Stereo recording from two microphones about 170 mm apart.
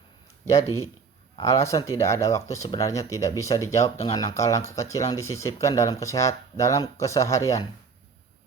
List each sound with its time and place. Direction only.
1.4 s speech: 15° left (ahead or behind)